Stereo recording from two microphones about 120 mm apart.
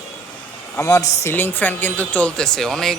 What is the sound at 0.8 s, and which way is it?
Speech, 25° left (ahead or behind).